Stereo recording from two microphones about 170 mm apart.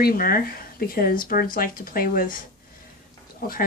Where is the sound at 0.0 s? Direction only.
60° left (ahead or behind).